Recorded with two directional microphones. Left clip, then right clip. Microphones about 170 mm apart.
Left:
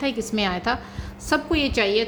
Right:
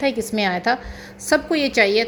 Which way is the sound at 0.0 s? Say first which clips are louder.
Right 4 dB; 20° right (ahead or behind).